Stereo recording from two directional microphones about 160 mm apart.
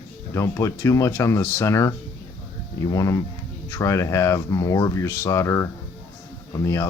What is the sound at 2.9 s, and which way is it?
Speech, 20° left (ahead or behind).